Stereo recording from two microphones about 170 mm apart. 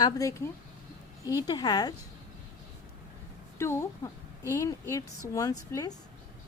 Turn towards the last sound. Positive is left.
turn(degrees=20)  # may be behind; listen again after turning